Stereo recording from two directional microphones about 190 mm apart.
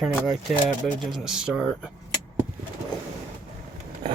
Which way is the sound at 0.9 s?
Centre (ahead or behind).